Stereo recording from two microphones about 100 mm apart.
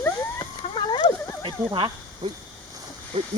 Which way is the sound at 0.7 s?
55° left (ahead or behind).